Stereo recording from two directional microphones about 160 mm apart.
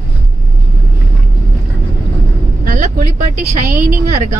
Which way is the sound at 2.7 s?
55° right (ahead or behind).